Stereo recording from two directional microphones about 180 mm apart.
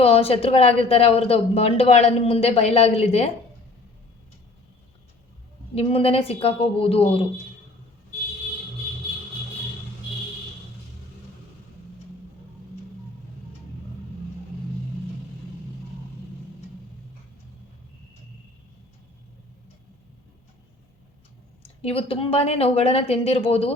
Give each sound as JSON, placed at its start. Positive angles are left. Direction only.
{"t": 0.0, "sound": "speech", "side_deg": 35}
{"t": 5.7, "sound": "speech", "side_deg": 30}
{"t": 21.6, "sound": "speech", "side_deg": 35}